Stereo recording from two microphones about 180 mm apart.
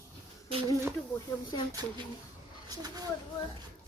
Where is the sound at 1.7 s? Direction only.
20° right (ahead or behind).